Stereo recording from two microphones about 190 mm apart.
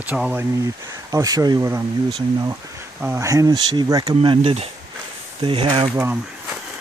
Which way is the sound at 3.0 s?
15° right (ahead or behind).